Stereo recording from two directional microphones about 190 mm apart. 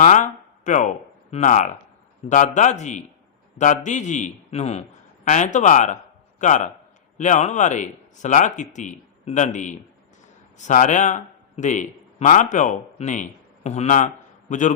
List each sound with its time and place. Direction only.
0.6 s a man's voice: 40° left (ahead or behind)